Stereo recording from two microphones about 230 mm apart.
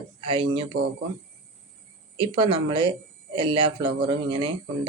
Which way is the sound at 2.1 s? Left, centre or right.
Right.